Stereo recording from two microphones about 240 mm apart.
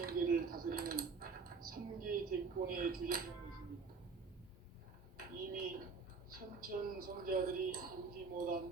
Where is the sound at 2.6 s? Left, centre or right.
Right.